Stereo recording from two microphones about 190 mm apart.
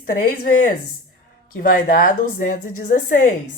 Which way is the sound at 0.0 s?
50° left (ahead or behind).